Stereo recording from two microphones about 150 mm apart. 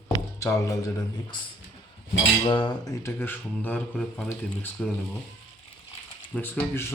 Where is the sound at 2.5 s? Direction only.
30° left (ahead or behind); by 4.8 s 10° left (ahead or behind).